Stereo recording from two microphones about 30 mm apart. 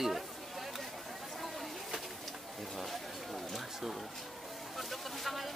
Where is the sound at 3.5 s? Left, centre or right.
Centre.